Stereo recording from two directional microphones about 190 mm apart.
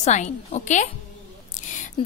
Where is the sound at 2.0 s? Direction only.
25° left (ahead or behind).